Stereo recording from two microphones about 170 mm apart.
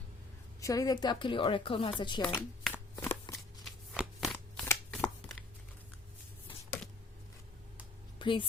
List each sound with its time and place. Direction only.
0.6 s speech: 20° left (ahead or behind)
2.2 s a sound: 10° left (ahead or behind)
3.3 s shuffling cards: centre (ahead or behind)
4.6 s shuffling cards: 10° left (ahead or behind)
8.2 s speech: 30° left (ahead or behind)